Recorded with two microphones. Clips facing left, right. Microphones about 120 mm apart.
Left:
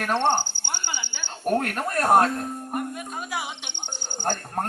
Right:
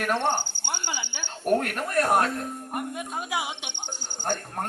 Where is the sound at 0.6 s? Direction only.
10° right (ahead or behind).